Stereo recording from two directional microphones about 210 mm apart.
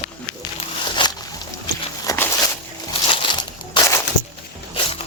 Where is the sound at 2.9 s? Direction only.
25° left (ahead or behind).